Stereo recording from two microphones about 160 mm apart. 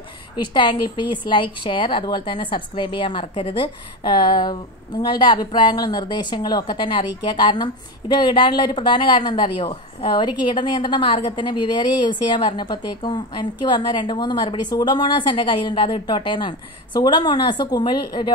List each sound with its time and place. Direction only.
0.4 s a woman's voice: 30° left (ahead or behind)